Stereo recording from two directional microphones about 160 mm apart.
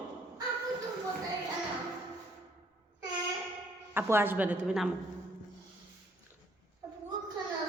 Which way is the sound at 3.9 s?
15° right (ahead or behind).